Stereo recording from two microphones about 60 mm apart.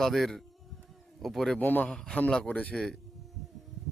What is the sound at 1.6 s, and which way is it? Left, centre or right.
Speech, left.